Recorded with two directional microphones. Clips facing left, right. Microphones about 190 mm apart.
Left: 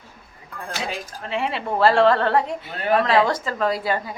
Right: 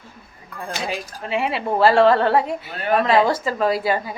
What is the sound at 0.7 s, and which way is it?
Speech, 5° right (ahead or behind).